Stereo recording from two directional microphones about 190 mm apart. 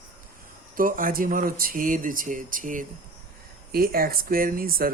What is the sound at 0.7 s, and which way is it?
Speech, 45° right (ahead or behind).